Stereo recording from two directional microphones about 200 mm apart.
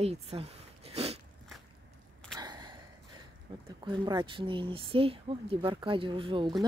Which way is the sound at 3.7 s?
20° right (ahead or behind).